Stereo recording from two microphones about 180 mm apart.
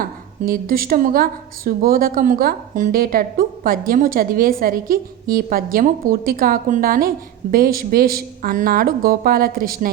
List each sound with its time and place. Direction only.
0.0 s a woman's voice: 50° right (ahead or behind)